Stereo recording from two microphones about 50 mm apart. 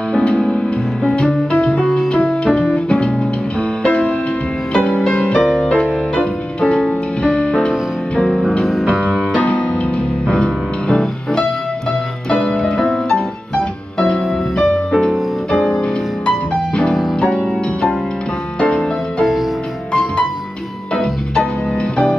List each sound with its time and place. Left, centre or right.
0.1 s music: centre
5.4 s music: centre
6.1 s music: centre
8.2 s music: centre
8.6 s music: centre
9.3 s music: left
12.7 s music: centre
15.5 s music: centre
16.3 s music: centre
18.6 s music: centre